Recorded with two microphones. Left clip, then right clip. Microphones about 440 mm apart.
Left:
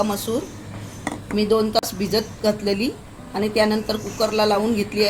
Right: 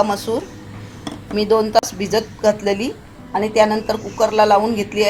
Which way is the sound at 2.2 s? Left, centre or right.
Right.